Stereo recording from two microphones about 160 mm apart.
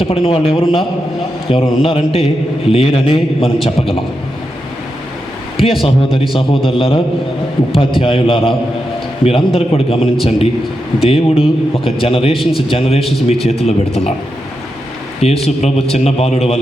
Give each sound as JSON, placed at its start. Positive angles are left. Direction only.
{"t": 0.0, "sound": "speech", "side_deg": 35}
{"t": 6.3, "sound": "speech", "side_deg": 35}
{"t": 12.4, "sound": "a man's voice", "side_deg": 0}
{"t": 12.6, "sound": "speech", "side_deg": 35}
{"t": 15.2, "sound": "speech", "side_deg": 40}